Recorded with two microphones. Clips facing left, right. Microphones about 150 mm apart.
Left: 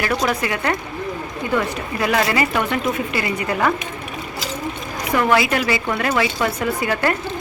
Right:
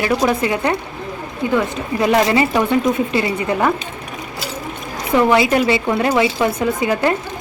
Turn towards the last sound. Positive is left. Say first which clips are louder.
# right 3 dB
turn(degrees=-20)  # may be behind; listen again after turning